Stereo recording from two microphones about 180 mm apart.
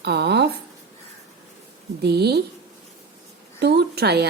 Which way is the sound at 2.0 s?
65° right (ahead or behind).